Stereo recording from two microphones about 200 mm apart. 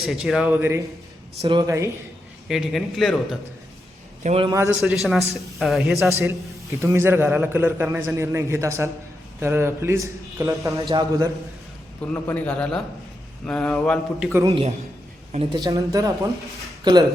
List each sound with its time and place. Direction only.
0.0 s a man's voice: centre (ahead or behind)
1.4 s speech: 25° right (ahead or behind)
2.5 s speech: centre (ahead or behind)
4.2 s a man's voice: 35° right (ahead or behind)
4.4 s a man's voice: 15° right (ahead or behind)
6.1 s a man's voice: 15° right (ahead or behind)
12.1 s a man's voice: 10° left (ahead or behind)
14.4 s a woman's voice: 25° right (ahead or behind)
15.5 s a man's voice: 15° right (ahead or behind)